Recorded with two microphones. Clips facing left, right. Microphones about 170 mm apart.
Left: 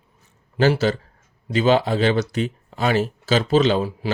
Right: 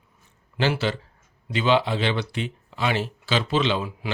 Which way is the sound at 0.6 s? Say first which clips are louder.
Left 6 dB; 40° left (ahead or behind).